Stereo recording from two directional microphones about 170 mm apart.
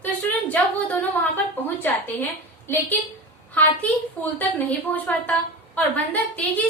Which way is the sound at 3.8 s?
10° left (ahead or behind).